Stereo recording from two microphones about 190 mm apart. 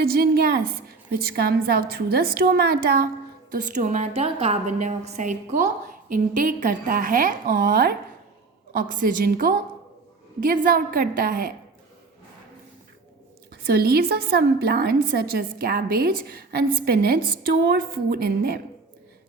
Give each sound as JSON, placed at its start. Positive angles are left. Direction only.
{"t": 0.0, "sound": "a woman's voice", "side_deg": -55}
{"t": 3.5, "sound": "a woman's voice", "side_deg": -40}
{"t": 13.5, "sound": "a woman's voice", "side_deg": -55}